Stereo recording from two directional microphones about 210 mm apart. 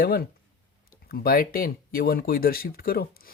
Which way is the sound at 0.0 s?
45° left (ahead or behind).